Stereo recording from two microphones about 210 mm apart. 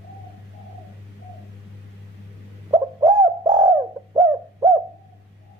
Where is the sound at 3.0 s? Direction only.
20° right (ahead or behind).